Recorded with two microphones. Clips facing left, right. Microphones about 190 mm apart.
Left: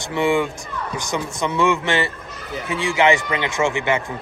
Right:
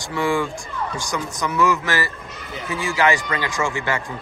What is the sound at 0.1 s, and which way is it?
Speech, 25° left (ahead or behind).